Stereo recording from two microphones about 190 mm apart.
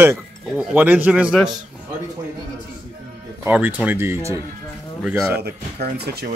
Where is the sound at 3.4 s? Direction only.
10° right (ahead or behind).